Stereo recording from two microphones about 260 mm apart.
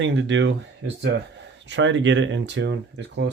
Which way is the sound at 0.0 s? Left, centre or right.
Right.